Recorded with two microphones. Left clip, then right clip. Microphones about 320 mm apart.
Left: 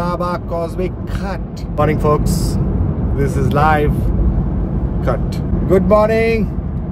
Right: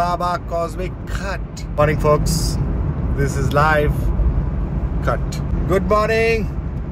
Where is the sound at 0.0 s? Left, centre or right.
Centre.